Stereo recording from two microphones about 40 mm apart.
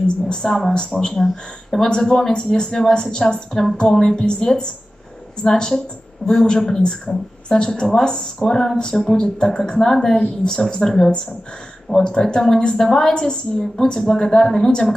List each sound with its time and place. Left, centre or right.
0.0 s speech: centre